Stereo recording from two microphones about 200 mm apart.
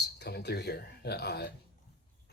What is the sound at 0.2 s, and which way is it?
Speech, 55° left (ahead or behind).